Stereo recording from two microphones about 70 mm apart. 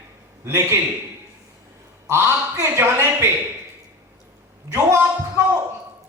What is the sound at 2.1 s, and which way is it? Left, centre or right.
Speech, right.